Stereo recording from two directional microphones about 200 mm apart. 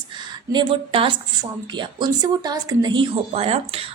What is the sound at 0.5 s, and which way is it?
Speech, 25° right (ahead or behind).